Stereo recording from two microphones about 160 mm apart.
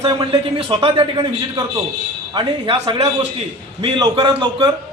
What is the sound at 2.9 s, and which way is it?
A man's voice, 40° right (ahead or behind).